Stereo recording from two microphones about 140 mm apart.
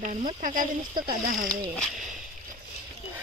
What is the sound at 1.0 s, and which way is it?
Speech, 80° right.